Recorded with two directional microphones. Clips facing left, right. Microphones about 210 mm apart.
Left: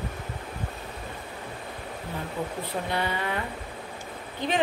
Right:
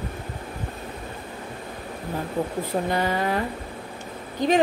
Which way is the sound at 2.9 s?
40° right (ahead or behind).